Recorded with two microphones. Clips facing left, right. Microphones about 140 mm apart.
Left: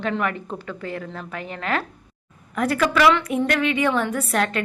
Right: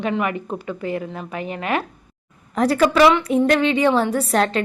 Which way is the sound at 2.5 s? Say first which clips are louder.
Right 4 dB; 30° right (ahead or behind).